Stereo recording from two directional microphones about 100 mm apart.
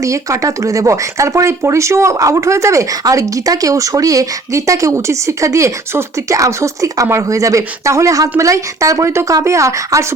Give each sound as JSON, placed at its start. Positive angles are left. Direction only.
{"t": 0.0, "sound": "speech", "side_deg": -35}